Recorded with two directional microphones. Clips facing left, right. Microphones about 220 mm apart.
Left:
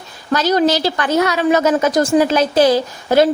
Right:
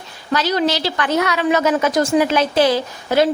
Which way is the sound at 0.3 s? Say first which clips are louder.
Left 4 dB; 45° left (ahead or behind).